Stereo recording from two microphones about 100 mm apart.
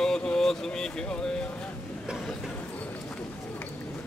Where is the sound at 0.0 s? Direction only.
5° left (ahead or behind).